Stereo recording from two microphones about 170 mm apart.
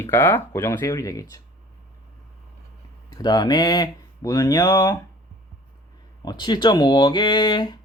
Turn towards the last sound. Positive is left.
turn(degrees=25)  # may be behind; listen again after turning